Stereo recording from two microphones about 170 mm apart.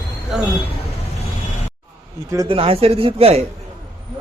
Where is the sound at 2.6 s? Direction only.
35° right (ahead or behind).